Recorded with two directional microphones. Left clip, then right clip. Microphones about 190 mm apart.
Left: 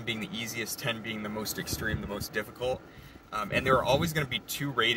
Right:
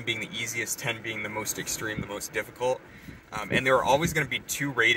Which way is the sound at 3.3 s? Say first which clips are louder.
Right 2 dB; 55° right (ahead or behind).